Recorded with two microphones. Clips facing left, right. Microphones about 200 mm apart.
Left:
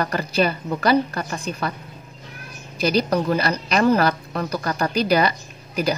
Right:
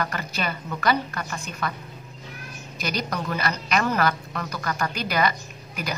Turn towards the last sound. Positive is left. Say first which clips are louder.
# left 9 dB
turn(degrees=35)  # may be behind; listen again after turning